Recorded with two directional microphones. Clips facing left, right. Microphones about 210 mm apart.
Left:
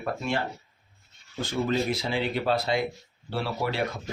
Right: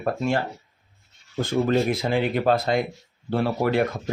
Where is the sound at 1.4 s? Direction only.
55° right (ahead or behind).